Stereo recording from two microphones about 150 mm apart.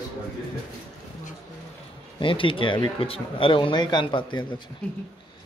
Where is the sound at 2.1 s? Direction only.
35° left (ahead or behind).